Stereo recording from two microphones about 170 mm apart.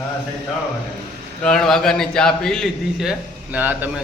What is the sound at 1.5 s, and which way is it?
A man's voice, centre (ahead or behind).